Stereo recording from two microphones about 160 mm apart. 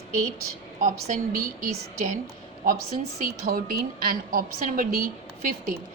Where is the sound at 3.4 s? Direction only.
65° right (ahead or behind).